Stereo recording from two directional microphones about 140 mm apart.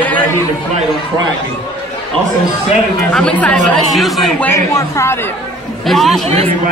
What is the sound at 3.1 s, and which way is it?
Speech, 5° left (ahead or behind).